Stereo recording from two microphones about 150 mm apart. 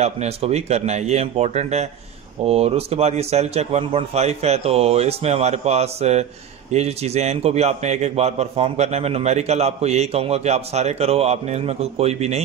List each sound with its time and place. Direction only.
0.0 s a man's voice: 45° right (ahead or behind)